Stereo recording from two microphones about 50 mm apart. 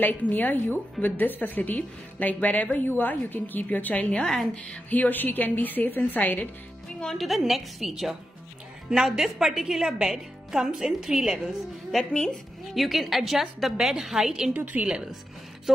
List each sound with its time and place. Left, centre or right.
0.0 s a woman's voice: left
4.2 s a woman's voice: centre
4.8 s a woman's voice: left
7.0 s a woman's voice: centre
12.0 s a woman's voice: centre
12.7 s a woman's voice: centre
14.5 s a woman's voice: right